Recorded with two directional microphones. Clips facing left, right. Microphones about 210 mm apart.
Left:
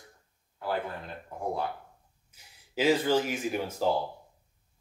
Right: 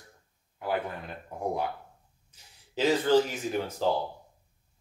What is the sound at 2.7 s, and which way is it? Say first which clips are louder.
Speech: right 2 dB; 10° left (ahead or behind).